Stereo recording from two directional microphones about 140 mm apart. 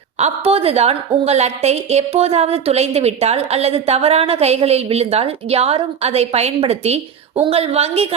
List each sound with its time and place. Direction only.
0.2 s a woman's voice: 45° right (ahead or behind)